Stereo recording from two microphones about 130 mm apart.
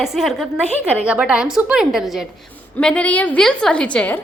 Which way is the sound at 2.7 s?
10° left (ahead or behind).